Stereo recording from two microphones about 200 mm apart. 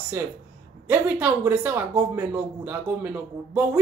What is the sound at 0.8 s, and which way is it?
Speech, 10° right (ahead or behind).